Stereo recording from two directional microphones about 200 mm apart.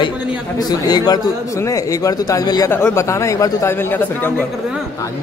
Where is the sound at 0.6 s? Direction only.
20° left (ahead or behind).